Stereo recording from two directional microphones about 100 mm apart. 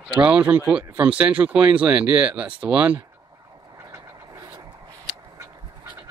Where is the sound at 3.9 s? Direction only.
35° right (ahead or behind).